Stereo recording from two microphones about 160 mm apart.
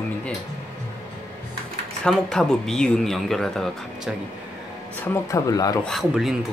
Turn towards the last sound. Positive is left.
turn(degrees=0)  # may be behind; listen again after turning